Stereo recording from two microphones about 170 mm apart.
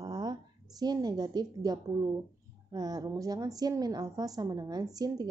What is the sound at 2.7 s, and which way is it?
A woman's voice, 25° right (ahead or behind).